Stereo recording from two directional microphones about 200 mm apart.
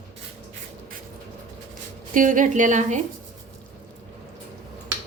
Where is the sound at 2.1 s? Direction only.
40° right (ahead or behind).